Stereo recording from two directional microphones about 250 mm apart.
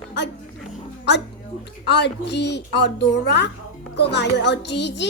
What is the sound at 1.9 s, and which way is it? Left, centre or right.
A woman's voice, left.